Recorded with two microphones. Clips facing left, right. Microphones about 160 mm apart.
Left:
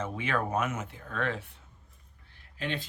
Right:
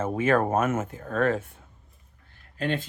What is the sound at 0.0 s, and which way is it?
Speech, 45° right (ahead or behind).